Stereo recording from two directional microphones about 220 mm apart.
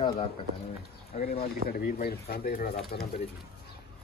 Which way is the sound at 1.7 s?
40° left (ahead or behind).